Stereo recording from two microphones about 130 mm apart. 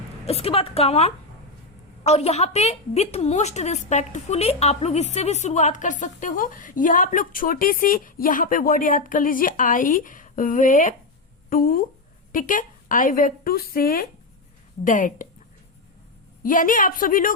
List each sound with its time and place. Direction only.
0.3 s a woman's voice: 50° left (ahead or behind); by 13.3 s 90° left
14.8 s a woman's voice: 90° left
16.4 s a woman's voice: 90° left